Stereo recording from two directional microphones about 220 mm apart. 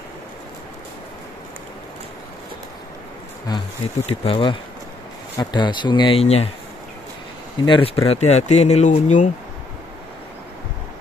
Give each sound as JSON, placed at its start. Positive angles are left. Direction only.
{"t": 3.4, "sound": "speech", "side_deg": 25}
{"t": 7.6, "sound": "speech", "side_deg": 25}